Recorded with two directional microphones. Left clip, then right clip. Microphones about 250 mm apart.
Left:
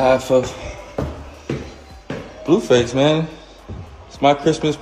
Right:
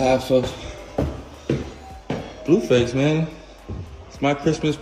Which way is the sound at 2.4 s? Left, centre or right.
Centre.